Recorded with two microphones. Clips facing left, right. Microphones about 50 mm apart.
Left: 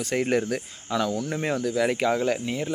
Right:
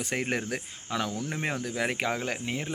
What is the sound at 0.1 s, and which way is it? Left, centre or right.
Speech, centre.